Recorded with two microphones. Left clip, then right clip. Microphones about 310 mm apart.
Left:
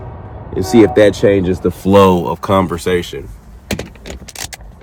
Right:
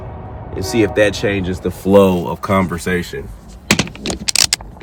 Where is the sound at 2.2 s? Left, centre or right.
Centre.